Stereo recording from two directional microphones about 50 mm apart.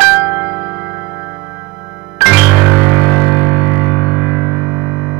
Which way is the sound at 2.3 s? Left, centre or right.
Right.